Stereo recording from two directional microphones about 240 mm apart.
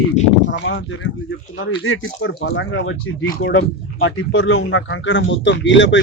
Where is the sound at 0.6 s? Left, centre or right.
Left.